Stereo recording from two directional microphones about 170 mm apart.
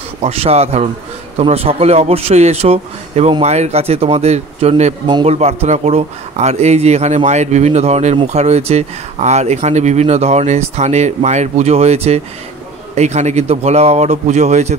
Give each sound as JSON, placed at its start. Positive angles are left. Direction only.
{"t": 0.2, "sound": "speech", "side_deg": -35}
{"t": 5.0, "sound": "a man's voice", "side_deg": -25}
{"t": 5.3, "sound": "speech", "side_deg": -40}